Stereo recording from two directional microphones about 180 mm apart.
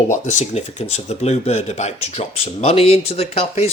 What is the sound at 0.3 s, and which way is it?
Speech, 40° left (ahead or behind).